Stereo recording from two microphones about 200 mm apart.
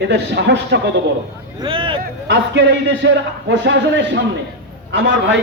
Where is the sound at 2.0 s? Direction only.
60° right (ahead or behind).